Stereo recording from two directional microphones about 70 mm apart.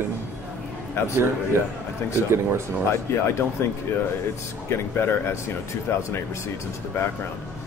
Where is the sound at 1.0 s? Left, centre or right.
Left.